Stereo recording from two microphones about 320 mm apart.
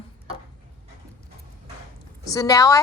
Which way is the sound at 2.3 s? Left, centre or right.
Centre.